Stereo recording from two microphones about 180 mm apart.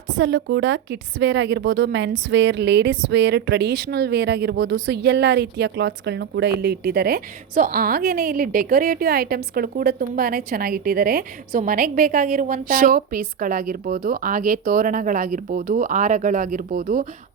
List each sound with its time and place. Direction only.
0.1 s a woman's voice: 75° right (ahead or behind); by 17.1 s 50° right (ahead or behind)